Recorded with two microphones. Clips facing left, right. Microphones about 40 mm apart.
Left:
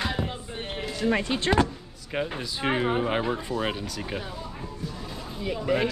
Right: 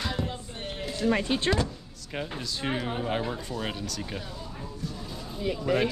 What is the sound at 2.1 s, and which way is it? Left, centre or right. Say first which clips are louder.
Speech: left 4 dB; left.